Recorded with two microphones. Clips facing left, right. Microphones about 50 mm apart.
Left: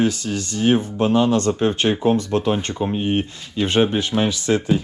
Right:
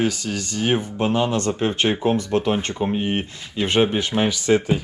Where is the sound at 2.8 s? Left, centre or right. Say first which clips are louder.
Left 2 dB; right.